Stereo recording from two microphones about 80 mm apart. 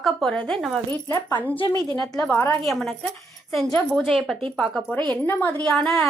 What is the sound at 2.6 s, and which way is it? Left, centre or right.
Speech, centre.